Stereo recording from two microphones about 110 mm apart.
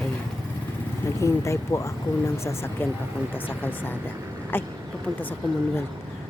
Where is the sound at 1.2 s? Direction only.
25° left (ahead or behind).